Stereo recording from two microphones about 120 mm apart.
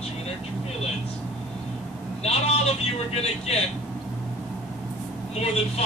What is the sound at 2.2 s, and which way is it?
Speech, 60° left (ahead or behind).